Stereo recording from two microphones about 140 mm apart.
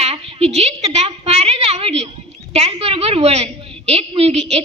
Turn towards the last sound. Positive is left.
turn(degrees=-50)  # may be behind; listen again after turning